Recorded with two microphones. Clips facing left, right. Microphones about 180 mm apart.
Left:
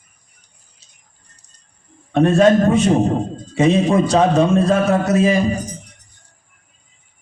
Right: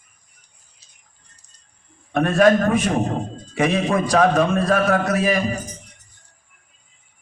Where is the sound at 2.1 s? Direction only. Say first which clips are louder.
Left 3 dB; 25° left (ahead or behind).